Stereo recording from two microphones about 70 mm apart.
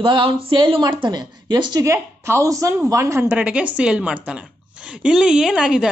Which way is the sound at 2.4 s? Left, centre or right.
Right.